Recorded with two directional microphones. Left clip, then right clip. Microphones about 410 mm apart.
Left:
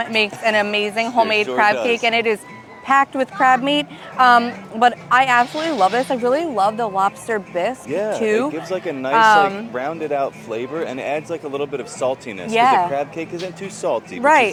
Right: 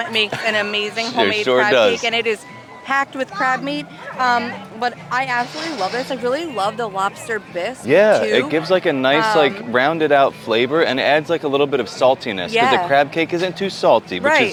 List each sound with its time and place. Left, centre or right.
0.0 s speech: left
7.9 s speech: right
12.5 s speech: left
12.9 s speech: right
14.3 s speech: left